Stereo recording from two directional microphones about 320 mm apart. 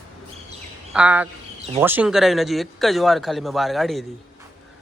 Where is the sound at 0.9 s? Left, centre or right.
Centre.